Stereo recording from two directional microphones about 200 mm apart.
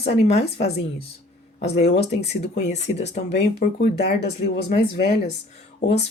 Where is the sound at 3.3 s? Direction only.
50° left (ahead or behind).